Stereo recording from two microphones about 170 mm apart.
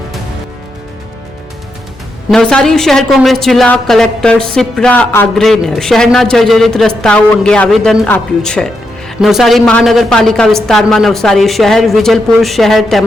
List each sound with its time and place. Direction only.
2.3 s a woman's voice: 5° left (ahead or behind)